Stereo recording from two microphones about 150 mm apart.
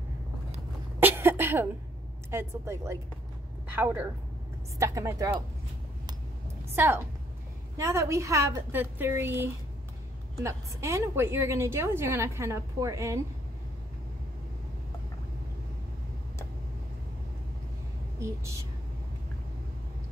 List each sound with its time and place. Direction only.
0.9 s cough: 15° right (ahead or behind)
2.3 s a woman's voice: 20° right (ahead or behind)
6.7 s a woman's voice: 15° right (ahead or behind)
18.2 s a woman's voice: 20° right (ahead or behind)